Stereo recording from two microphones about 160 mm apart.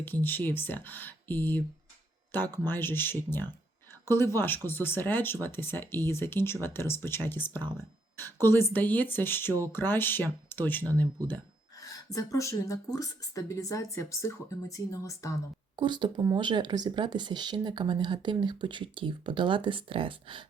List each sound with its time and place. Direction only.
0.0 s speech: 10° left (ahead or behind)
12.1 s speech: 20° left (ahead or behind)
15.7 s speech: 30° right (ahead or behind)